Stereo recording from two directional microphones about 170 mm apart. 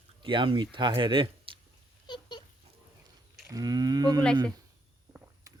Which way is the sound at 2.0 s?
25° left (ahead or behind).